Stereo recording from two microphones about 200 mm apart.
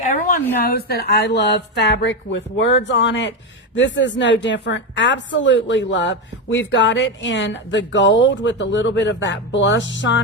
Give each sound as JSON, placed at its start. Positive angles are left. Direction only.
{"t": 0.6, "sound": "a woman's voice", "side_deg": 50}